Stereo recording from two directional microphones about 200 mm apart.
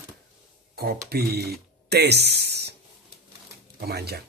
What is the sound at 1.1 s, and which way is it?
Speech, 50° right (ahead or behind).